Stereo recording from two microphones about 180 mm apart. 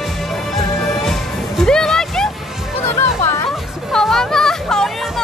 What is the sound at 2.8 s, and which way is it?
Music, 15° left (ahead or behind).